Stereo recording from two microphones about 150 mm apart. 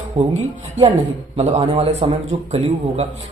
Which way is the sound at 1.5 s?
40° right (ahead or behind).